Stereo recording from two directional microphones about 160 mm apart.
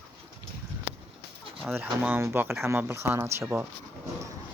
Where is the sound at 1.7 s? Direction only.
10° right (ahead or behind).